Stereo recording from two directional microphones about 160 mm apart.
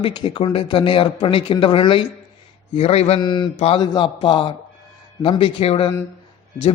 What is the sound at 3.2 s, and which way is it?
Mantra, 25° left (ahead or behind).